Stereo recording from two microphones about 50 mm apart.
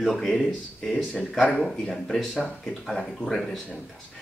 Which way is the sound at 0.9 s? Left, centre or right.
Centre.